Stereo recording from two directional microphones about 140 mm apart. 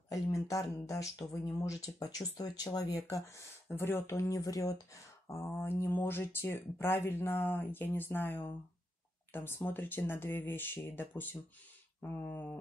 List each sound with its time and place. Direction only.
0.1 s speech: 25° left (ahead or behind)